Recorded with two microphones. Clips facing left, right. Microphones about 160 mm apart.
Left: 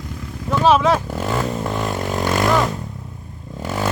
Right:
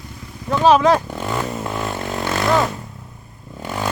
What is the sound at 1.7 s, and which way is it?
Vehicle, 10° left (ahead or behind).